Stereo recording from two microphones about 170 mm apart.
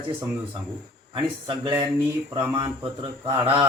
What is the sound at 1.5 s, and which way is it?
Speech, 25° right (ahead or behind).